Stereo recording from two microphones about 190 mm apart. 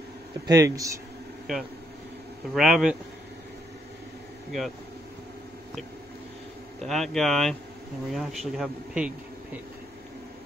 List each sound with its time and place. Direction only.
0.5 s speech: 20° right (ahead or behind)
2.5 s speech: 5° right (ahead or behind)
4.5 s speech: centre (ahead or behind)
6.8 s speech: centre (ahead or behind)